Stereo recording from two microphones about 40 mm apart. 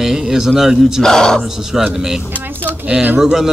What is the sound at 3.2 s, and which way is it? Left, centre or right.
Speech, centre.